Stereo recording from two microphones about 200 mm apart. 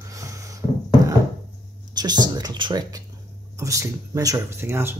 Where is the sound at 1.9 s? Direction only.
20° right (ahead or behind).